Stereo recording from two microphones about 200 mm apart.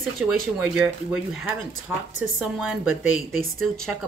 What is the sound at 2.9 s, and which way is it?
Speech, 90° left.